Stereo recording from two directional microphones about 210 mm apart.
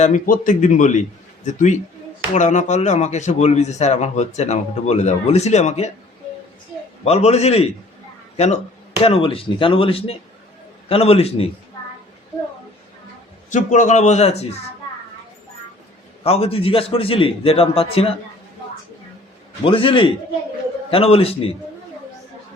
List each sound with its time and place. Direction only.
0.0 s speech: 35° left (ahead or behind)
7.0 s a man's voice: 30° left (ahead or behind)
13.5 s speech: 35° left (ahead or behind)
16.2 s a man's voice: 30° left (ahead or behind)
19.6 s a man's voice: 25° left (ahead or behind)